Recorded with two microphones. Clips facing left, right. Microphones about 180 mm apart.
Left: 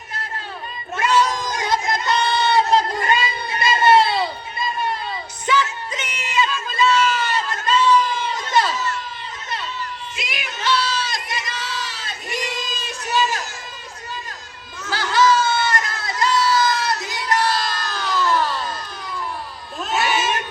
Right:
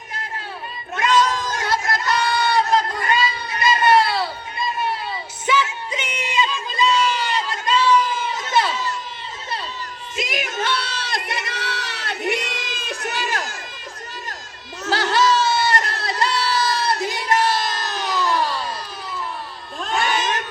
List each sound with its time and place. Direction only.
0.9 s cat: 10° left (ahead or behind)
5.5 s a sound: 10° right (ahead or behind)
10.2 s crowd: 45° right (ahead or behind)
14.8 s crowd: 40° right (ahead or behind); by 18.7 s 10° right (ahead or behind)
19.8 s crowd: 5° left (ahead or behind)